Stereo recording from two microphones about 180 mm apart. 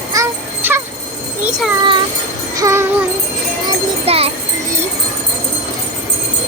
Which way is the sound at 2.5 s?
15° right (ahead or behind).